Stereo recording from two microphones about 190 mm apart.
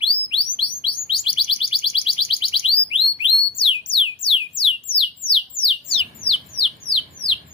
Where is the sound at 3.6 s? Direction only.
30° left (ahead or behind).